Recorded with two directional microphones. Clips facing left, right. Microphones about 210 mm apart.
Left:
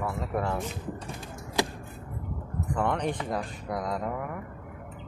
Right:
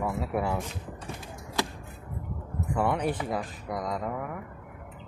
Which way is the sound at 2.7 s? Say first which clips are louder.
Right 1 dB; 10° right (ahead or behind).